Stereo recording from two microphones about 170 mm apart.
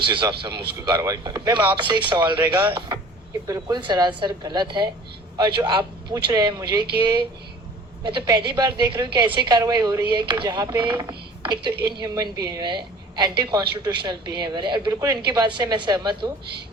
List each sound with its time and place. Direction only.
0.0 s a woman's voice: 30° right (ahead or behind)